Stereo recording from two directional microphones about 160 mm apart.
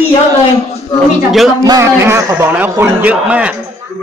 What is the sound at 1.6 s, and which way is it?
A man's voice, 20° right (ahead or behind).